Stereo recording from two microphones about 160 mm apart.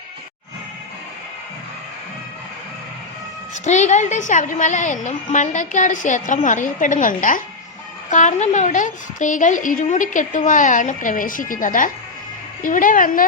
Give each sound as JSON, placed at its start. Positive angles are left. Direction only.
{"t": 3.5, "sound": "a woman's voice", "side_deg": 45}